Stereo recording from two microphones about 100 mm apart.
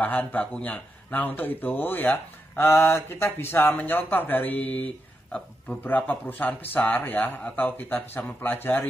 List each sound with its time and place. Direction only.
0.0 s speech: 15° left (ahead or behind)